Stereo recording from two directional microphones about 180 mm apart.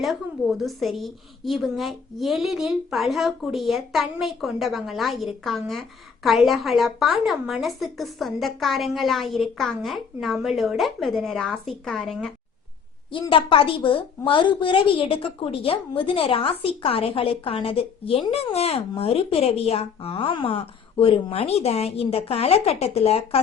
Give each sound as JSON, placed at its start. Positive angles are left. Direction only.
{"t": 0.0, "sound": "a woman's voice", "side_deg": 0}
{"t": 13.1, "sound": "a woman's voice", "side_deg": 30}